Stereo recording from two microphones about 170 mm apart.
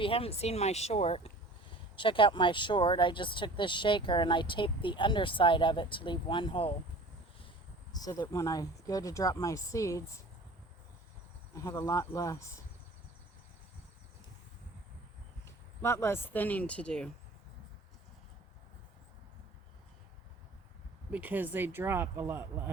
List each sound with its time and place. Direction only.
0.0 s speech: 35° left (ahead or behind)
7.9 s speech: 20° left (ahead or behind)
11.5 s speech: 15° left (ahead or behind)
15.4 s speech: 15° left (ahead or behind)
21.1 s speech: 10° right (ahead or behind)